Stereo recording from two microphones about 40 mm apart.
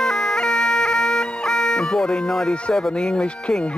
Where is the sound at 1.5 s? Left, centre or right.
Centre.